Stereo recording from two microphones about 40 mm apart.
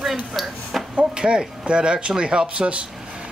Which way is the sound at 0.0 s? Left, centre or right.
Centre.